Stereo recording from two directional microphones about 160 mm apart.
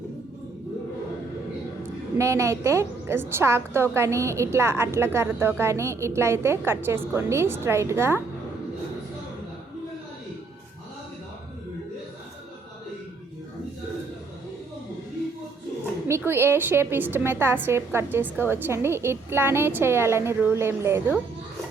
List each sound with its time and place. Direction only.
2.1 s a woman's voice: 20° right (ahead or behind)
16.0 s a woman's voice: 15° right (ahead or behind)